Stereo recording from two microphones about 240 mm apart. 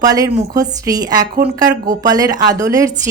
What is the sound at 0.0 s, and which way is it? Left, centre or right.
Speech, centre.